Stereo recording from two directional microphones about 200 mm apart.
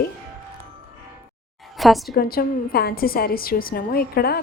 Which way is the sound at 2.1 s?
50° left (ahead or behind).